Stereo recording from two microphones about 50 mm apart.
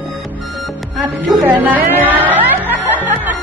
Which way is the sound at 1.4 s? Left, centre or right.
Right.